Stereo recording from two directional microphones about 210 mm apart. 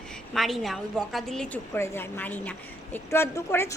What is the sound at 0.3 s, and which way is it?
A woman's voice, centre (ahead or behind).